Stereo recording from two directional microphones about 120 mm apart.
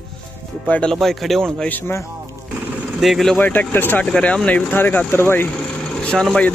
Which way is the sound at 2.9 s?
Centre (ahead or behind).